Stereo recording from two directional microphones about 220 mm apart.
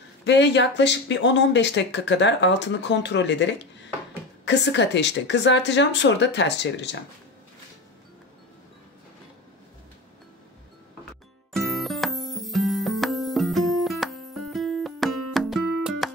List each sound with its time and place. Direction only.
0.2 s speech: 50° left (ahead or behind)
11.5 s music: centre (ahead or behind)